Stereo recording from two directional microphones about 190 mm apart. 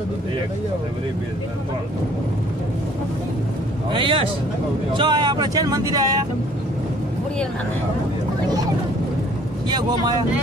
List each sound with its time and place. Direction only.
3.9 s speech: 25° right (ahead or behind)
9.7 s speech: 20° right (ahead or behind)